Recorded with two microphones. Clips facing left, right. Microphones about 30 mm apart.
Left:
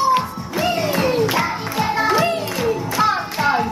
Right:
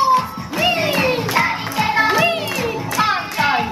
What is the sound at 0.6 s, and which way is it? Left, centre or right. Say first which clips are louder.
Music: right 2 dB; right.